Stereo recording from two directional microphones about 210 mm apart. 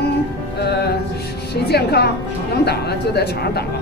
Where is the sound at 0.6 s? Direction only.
50° left (ahead or behind).